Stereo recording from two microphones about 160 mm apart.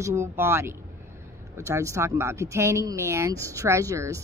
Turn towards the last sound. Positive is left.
turn(degrees=-20)  # may be behind; listen again after turning